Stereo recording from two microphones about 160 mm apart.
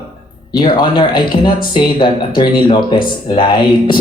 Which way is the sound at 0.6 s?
30° left (ahead or behind).